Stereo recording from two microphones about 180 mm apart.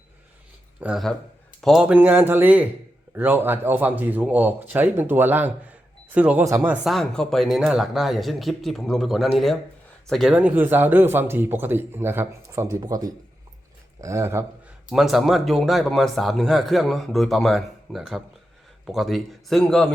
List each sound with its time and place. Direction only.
0.8 s a man's voice: 5° right (ahead or behind)
6.8 s a man's voice: centre (ahead or behind); by 14.4 s 15° right (ahead or behind)
14.8 s a man's voice: centre (ahead or behind)